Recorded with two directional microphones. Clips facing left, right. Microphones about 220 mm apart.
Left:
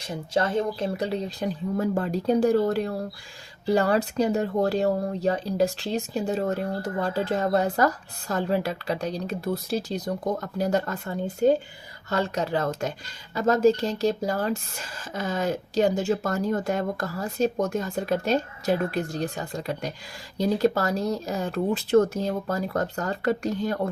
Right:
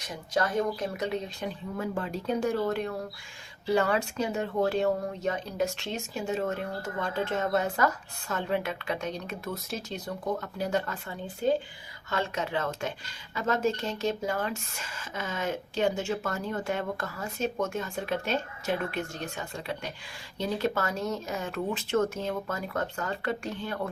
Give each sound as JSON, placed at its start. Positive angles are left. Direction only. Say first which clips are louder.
{"t": 0.0, "sound": "speech", "louder": "left 4 dB", "side_deg": 30}